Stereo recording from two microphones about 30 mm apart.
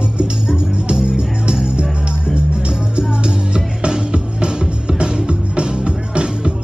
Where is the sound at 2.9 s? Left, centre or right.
Right.